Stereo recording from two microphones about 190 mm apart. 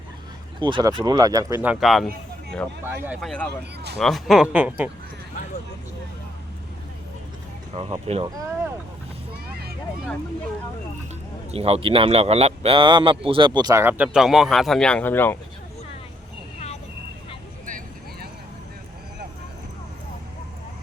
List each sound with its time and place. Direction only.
0.6 s speech: 20° right (ahead or behind); by 2.1 s centre (ahead or behind)
2.8 s speech: 10° right (ahead or behind)
3.2 s speech: 5° left (ahead or behind)
7.7 s speech: 30° right (ahead or behind)
11.5 s speech: 30° right (ahead or behind); by 15.4 s 10° left (ahead or behind)
17.7 s vehicle: 45° right (ahead or behind)